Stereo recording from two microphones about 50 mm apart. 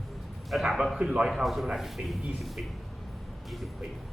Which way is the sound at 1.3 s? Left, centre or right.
Centre.